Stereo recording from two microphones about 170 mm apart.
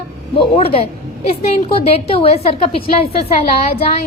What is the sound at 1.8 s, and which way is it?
Speech, 40° left (ahead or behind).